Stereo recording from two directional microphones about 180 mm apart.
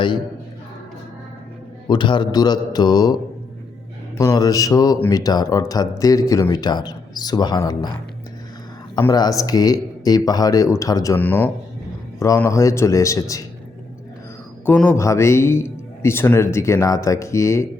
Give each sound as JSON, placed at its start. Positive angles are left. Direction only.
{"t": 1.9, "sound": "speech", "side_deg": 25}
{"t": 4.2, "sound": "speech", "side_deg": 20}
{"t": 9.0, "sound": "a man's voice", "side_deg": 20}
{"t": 14.7, "sound": "a man's voice", "side_deg": 10}